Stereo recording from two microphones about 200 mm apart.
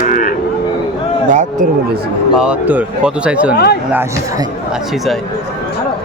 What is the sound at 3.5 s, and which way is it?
Speech, 50° left (ahead or behind).